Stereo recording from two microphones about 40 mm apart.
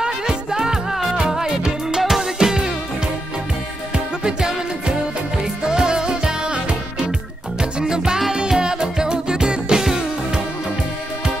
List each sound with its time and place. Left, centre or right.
0.0 s music: centre
3.9 s music: centre
7.8 s music: centre